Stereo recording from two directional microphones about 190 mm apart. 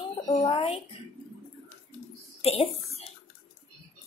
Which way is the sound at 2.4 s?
35° left (ahead or behind).